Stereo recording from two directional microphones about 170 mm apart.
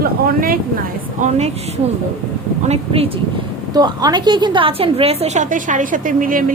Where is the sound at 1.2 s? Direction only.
40° right (ahead or behind).